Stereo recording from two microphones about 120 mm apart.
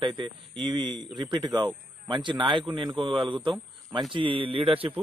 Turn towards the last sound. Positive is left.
turn(degrees=-50)  # may be behind; listen again after turning